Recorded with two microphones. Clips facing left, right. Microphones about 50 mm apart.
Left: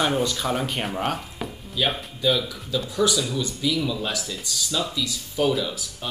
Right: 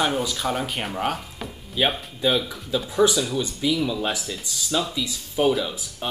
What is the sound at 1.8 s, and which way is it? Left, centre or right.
Speech, centre.